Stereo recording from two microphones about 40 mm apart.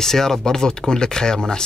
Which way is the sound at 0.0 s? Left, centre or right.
Centre.